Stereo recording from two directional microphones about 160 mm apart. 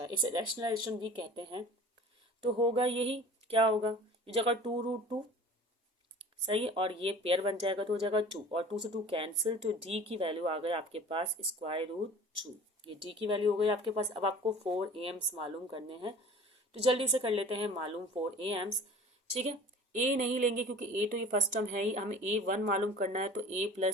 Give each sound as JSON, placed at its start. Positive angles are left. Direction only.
{"t": 0.0, "sound": "speech", "side_deg": -25}
{"t": 6.4, "sound": "speech", "side_deg": -35}
{"t": 19.4, "sound": "a woman's voice", "side_deg": -50}